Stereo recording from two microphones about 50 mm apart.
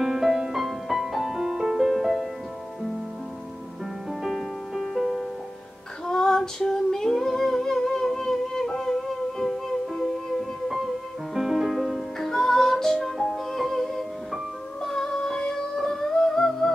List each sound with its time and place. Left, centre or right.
0.0 s music: centre
4.2 s music: centre
6.0 s female singing: centre
11.3 s music: centre